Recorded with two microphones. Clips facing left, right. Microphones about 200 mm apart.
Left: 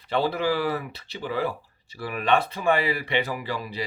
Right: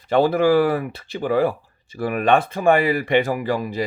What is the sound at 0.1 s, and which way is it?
Speech, 50° right (ahead or behind).